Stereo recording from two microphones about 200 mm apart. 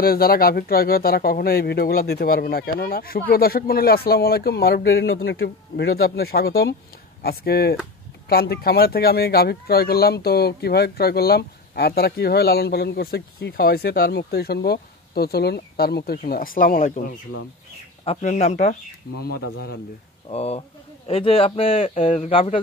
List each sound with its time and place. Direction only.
0.0 s speech: 50° left (ahead or behind)
4.9 s speech: 75° left (ahead or behind); by 18.8 s 35° left (ahead or behind)
19.1 s speech: 50° left (ahead or behind)
20.2 s a man's voice: 30° left (ahead or behind)